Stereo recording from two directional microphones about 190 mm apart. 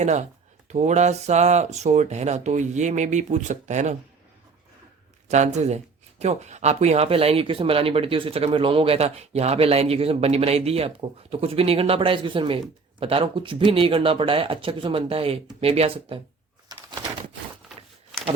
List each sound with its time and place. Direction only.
0.0 s speech: 40° right (ahead or behind)
5.3 s speech: 40° right (ahead or behind)
16.6 s bird: 25° right (ahead or behind)